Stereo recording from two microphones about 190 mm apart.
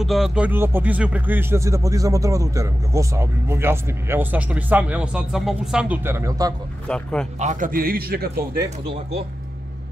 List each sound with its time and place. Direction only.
0.0 s speech: centre (ahead or behind); by 6.5 s 20° right (ahead or behind)
6.9 s speech: 5° left (ahead or behind)
7.3 s a man's voice: 40° right (ahead or behind)